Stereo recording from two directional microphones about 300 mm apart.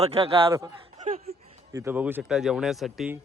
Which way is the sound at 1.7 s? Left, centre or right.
Centre.